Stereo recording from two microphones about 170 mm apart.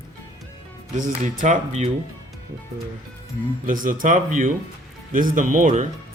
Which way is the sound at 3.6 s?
50° right (ahead or behind).